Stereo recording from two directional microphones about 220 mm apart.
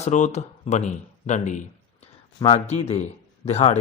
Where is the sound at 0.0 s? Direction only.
35° left (ahead or behind).